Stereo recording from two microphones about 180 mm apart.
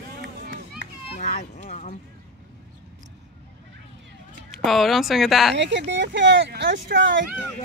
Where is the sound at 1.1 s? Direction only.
50° left (ahead or behind).